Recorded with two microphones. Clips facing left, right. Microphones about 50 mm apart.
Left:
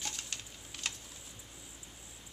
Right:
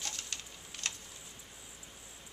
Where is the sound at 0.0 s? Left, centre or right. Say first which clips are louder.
Even; centre.